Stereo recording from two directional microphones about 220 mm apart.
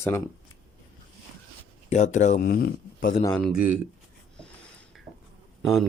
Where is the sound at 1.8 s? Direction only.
35° left (ahead or behind).